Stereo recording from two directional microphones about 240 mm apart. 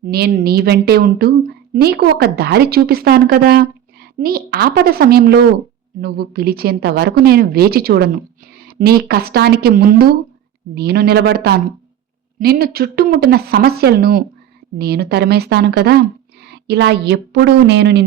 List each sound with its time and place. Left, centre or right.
0.0 s a woman's voice: right